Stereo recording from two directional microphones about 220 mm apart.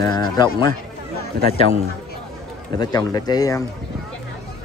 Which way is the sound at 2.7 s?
15° left (ahead or behind).